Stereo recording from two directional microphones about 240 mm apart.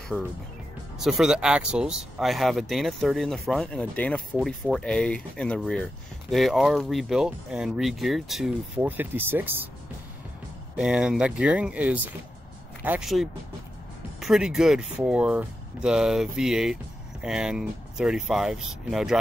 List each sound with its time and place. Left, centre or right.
1.0 s speech: centre
10.8 s speech: centre